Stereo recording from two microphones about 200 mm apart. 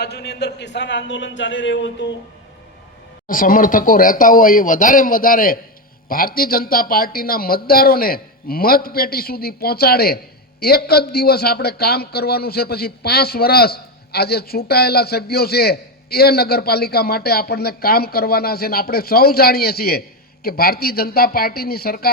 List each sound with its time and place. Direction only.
0.0 s speech: 55° left (ahead or behind)
3.2 s a man's voice: 45° left (ahead or behind)